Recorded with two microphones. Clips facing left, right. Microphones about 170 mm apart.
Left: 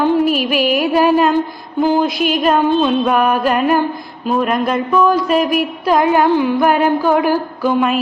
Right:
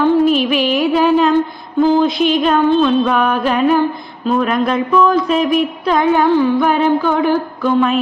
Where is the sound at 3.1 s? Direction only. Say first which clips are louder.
Left 1 dB; 5° left (ahead or behind).